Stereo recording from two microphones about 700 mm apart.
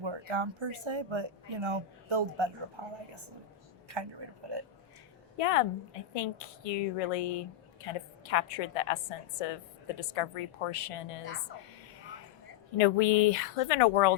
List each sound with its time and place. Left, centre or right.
0.0 s speech: right
5.4 s a woman's voice: left
12.7 s a woman's voice: left